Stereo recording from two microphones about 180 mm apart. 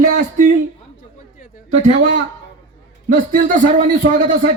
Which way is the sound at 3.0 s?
45° right (ahead or behind).